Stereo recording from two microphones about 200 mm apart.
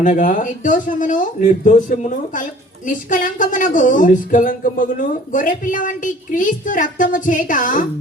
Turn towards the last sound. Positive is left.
turn(degrees=40)  # may be behind; listen again after turning